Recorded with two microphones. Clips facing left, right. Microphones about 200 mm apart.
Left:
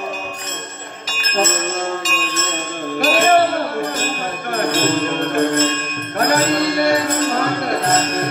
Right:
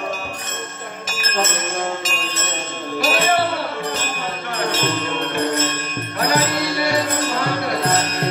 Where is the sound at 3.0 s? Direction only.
50° left (ahead or behind).